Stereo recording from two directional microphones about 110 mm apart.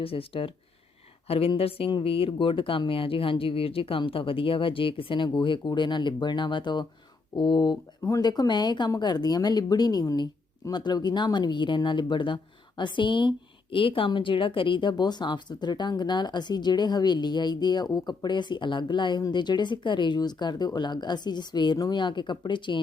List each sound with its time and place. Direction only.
0.0 s speech: 55° left (ahead or behind)
8.0 s speech: 35° left (ahead or behind)